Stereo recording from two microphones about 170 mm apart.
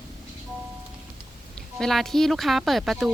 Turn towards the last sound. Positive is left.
turn(degrees=0)  # may be behind; listen again after turning